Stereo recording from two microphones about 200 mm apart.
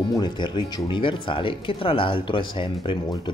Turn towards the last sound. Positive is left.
turn(degrees=25)  # may be behind; listen again after turning